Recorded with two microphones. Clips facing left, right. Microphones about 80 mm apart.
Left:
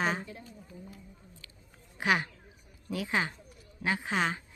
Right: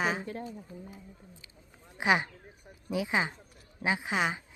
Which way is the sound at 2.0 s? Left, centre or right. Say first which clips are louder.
Right 2 dB; centre.